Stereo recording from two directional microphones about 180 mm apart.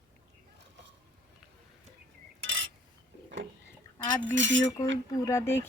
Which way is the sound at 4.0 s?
90° right.